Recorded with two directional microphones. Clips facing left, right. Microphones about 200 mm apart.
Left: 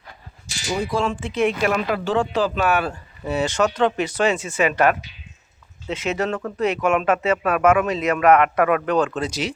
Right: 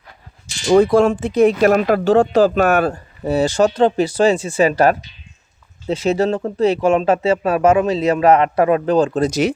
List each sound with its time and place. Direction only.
0.7 s speech: 60° right (ahead or behind); by 9.5 s 45° right (ahead or behind)